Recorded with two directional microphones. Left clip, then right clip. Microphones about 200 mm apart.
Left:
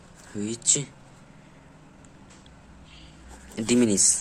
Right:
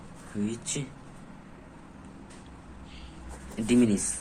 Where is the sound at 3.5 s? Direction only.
40° left (ahead or behind).